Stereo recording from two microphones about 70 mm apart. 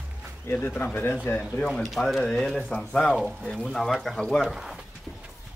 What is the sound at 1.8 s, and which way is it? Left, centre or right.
Speech, centre.